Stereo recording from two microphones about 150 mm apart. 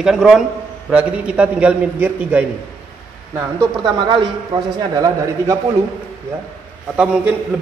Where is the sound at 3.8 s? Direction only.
30° right (ahead or behind).